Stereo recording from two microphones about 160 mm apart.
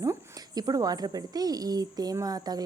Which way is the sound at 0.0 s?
20° right (ahead or behind).